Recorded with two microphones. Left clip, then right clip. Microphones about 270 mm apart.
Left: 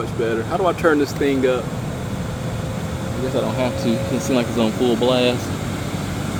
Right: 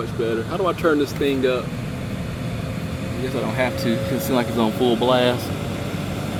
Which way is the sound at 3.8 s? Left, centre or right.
Centre.